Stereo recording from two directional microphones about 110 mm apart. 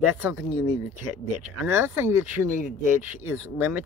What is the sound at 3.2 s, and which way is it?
Speech, 15° right (ahead or behind).